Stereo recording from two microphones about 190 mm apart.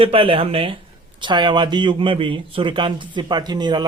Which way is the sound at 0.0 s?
30° right (ahead or behind).